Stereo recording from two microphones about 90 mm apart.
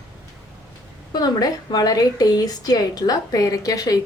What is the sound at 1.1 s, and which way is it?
A woman's voice, 45° left (ahead or behind).